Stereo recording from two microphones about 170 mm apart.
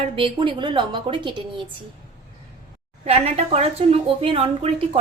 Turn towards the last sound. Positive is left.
turn(degrees=-35)  # may be behind; listen again after turning